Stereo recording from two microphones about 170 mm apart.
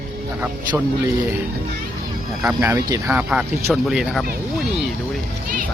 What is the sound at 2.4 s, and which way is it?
Speech, 10° right (ahead or behind).